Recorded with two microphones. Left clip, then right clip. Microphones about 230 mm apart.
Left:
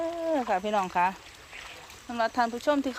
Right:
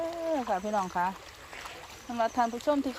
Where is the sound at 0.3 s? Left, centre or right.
Centre.